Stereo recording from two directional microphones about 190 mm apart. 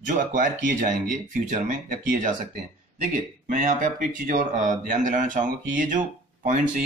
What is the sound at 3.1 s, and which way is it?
Speech, 40° right (ahead or behind).